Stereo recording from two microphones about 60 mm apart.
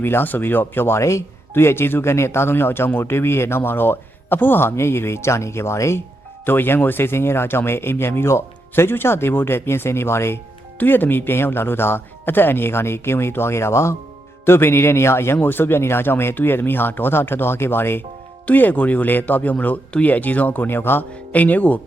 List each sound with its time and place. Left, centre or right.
0.0 s speech: left
4.7 s speech: left
6.4 s speech: left
10.8 s speech: left
18.4 s speech: left